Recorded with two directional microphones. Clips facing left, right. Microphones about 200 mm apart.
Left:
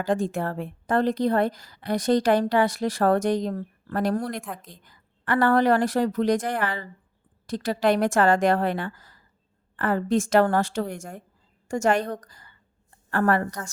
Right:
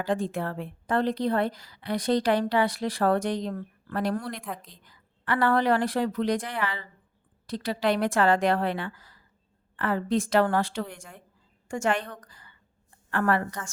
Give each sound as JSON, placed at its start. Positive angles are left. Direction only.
{"t": 0.0, "sound": "a woman's voice", "side_deg": 45}